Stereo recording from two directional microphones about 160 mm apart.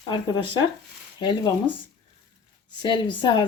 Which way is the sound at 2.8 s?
30° left (ahead or behind).